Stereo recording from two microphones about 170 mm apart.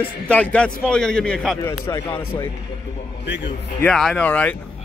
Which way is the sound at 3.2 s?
90° left.